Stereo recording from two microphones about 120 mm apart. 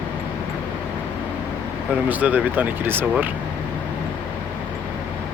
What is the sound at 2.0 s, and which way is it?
Speech, 15° right (ahead or behind).